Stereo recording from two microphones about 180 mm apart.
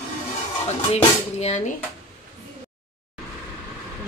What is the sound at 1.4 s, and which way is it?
Speech, 40° left (ahead or behind).